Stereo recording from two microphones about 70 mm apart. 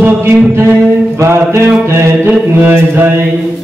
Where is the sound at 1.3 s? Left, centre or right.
Right.